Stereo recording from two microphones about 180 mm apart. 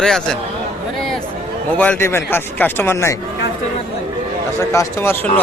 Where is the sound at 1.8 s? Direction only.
10° left (ahead or behind).